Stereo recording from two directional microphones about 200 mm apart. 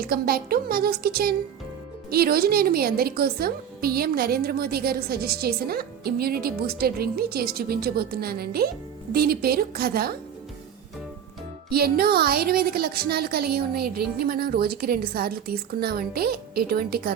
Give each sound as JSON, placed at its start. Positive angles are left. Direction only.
{"t": 0.0, "sound": "a woman's voice", "side_deg": -50}
{"t": 11.7, "sound": "a woman's voice", "side_deg": -50}